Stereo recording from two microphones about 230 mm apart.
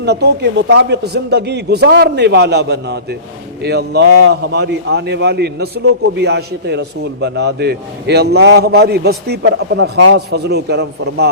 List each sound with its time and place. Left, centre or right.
0.0 s a man's voice: right